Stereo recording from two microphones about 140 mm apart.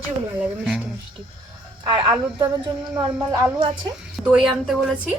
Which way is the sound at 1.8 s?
35° right (ahead or behind).